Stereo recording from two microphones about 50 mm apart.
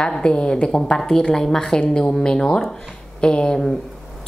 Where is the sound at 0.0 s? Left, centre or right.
Centre.